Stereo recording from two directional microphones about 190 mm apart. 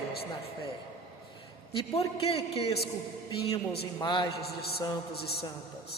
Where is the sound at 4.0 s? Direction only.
25° left (ahead or behind).